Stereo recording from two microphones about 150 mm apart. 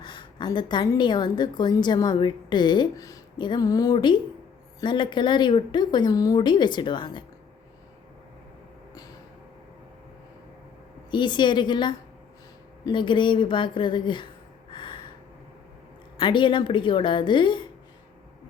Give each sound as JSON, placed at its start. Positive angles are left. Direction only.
{"t": 0.0, "sound": "a woman's voice", "side_deg": 30}
{"t": 11.1, "sound": "speech", "side_deg": 30}
{"t": 14.7, "sound": "gasp", "side_deg": 30}
{"t": 16.2, "sound": "speech", "side_deg": 30}